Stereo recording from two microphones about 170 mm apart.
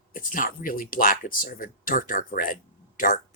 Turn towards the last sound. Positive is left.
turn(degrees=50)  # may be behind; listen again after turning